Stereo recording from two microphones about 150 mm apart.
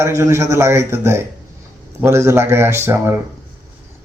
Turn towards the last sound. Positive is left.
turn(degrees=-15)  # may be behind; listen again after turning